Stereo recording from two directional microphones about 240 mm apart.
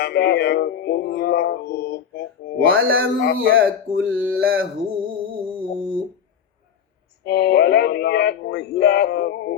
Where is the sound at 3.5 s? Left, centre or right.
Right.